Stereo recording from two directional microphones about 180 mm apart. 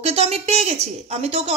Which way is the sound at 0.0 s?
35° right (ahead or behind).